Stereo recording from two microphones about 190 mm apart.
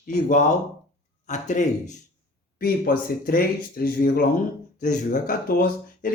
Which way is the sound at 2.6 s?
50° left (ahead or behind).